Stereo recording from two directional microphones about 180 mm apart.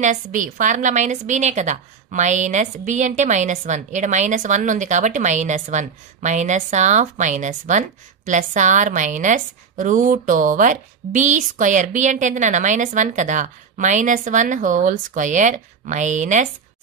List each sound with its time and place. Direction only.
0.0 s a woman's voice: 45° right (ahead or behind)